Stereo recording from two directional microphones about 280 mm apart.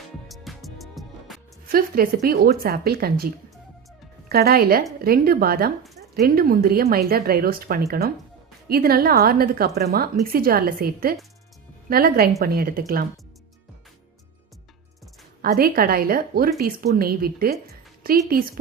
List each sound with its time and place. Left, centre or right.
0.3 s music: centre
1.6 s a woman's voice: right
4.3 s a woman's voice: right
15.4 s a woman's voice: right